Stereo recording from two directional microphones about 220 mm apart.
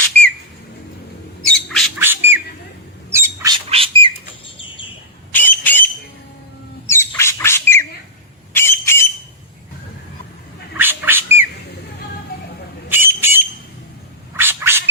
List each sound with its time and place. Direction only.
0.0 s whistle: 5° left (ahead or behind)
1.5 s squawk: centre (ahead or behind)
2.0 s bird: 10° right (ahead or behind)
3.1 s squawk: 15° right (ahead or behind)
3.7 s bird: 25° right (ahead or behind)
4.4 s bird: 25° left (ahead or behind)
5.3 s a sound: 10° left (ahead or behind)
6.8 s squawk: 10° left (ahead or behind)
10.8 s squawk: 10° right (ahead or behind)
12.9 s bird: 10° right (ahead or behind)
14.3 s a sound: 10° right (ahead or behind)